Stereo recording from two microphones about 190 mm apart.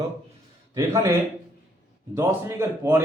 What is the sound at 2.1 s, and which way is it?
Speech, 15° right (ahead or behind).